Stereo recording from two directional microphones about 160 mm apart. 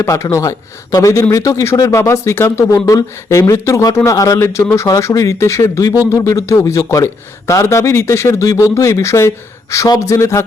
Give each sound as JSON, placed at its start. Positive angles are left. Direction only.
{"t": 0.0, "sound": "speech", "side_deg": 20}